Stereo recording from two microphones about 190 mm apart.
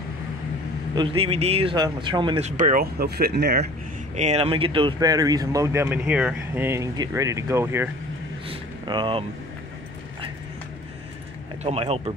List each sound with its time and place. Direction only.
0.9 s speech: 30° right (ahead or behind)
2.5 s speech: 45° right (ahead or behind)
4.1 s speech: 35° right (ahead or behind); by 7.9 s 10° right (ahead or behind)
8.5 s a sound: 25° right (ahead or behind)
11.6 s speech: 30° right (ahead or behind)